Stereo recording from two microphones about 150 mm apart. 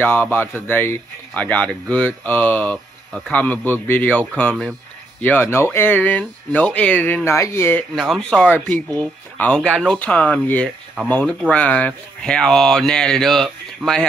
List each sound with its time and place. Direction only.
0.0 s speech: 15° left (ahead or behind)
5.2 s speech: 15° left (ahead or behind)
7.9 s speech: centre (ahead or behind)